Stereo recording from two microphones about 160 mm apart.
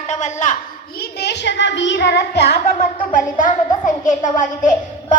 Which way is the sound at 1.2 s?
90° left.